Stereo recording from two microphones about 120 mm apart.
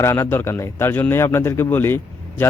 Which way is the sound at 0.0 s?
20° left (ahead or behind).